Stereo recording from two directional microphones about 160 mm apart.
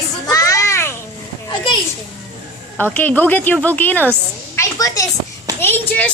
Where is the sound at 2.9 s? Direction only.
10° left (ahead or behind).